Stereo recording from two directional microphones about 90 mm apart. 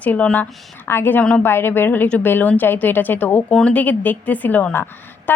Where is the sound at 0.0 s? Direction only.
15° left (ahead or behind).